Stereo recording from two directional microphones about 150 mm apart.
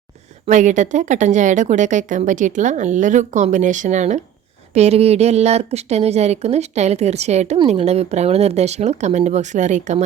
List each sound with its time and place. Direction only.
0.4 s a woman's voice: 55° right (ahead or behind)